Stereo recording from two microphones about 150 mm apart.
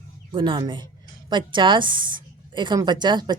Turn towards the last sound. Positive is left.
turn(degrees=-30)  # may be behind; listen again after turning